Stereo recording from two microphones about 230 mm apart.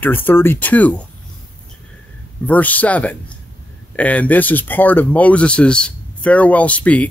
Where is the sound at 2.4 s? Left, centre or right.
Centre.